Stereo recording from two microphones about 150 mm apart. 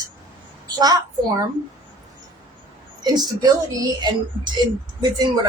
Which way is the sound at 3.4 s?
25° right (ahead or behind).